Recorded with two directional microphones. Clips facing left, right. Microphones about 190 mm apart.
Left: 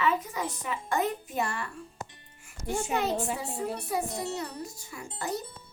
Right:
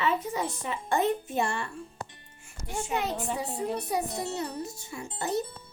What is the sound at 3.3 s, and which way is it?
A woman's voice, 20° right (ahead or behind).